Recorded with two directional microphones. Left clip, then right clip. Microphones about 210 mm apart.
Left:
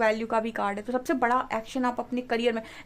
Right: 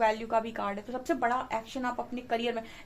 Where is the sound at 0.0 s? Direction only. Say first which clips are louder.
Left 2 dB; 50° left (ahead or behind).